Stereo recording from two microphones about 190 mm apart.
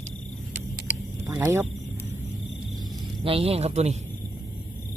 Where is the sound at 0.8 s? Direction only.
10° right (ahead or behind).